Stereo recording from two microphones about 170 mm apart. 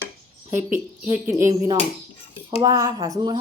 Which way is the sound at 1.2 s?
15° right (ahead or behind).